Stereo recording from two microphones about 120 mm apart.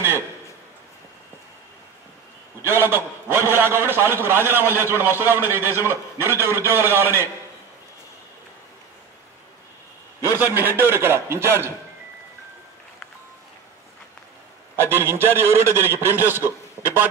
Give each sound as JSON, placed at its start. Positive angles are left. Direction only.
{"t": 2.6, "sound": "a man's voice", "side_deg": -20}
{"t": 10.2, "sound": "a man's voice", "side_deg": -20}
{"t": 14.8, "sound": "a man's voice", "side_deg": -20}